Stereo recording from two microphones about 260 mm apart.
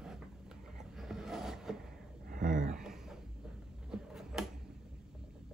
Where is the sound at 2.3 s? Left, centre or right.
Right.